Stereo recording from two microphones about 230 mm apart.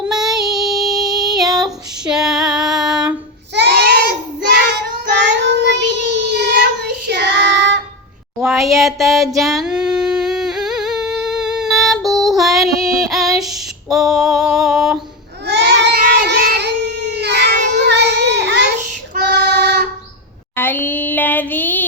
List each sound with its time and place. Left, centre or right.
0.1 s child singing: centre
3.5 s child singing: right
8.4 s a sound: centre
9.3 s humming: centre
15.4 s cat: right
17.8 s child singing: right
18.8 s child singing: right
19.3 s child singing: right
20.6 s a sound: centre